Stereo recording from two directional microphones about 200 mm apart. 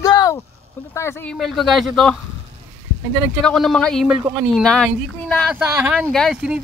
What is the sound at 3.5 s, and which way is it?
Speech, centre (ahead or behind).